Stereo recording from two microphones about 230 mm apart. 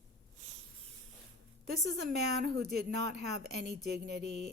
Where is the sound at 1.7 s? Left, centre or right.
Right.